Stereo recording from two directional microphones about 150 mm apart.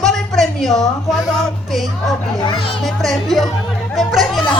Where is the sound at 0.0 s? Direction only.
Centre (ahead or behind).